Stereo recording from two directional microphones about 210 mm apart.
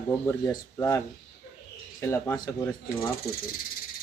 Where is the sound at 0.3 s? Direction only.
15° left (ahead or behind).